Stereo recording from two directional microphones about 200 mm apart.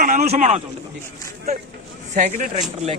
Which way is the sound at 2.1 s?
40° right (ahead or behind).